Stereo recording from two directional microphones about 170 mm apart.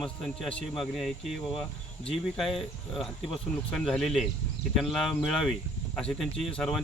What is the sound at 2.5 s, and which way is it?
Speech, centre (ahead or behind).